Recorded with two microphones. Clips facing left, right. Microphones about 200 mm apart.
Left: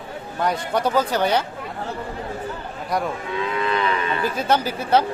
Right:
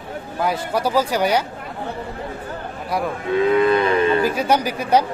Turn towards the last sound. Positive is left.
turn(degrees=-15)  # may be behind; listen again after turning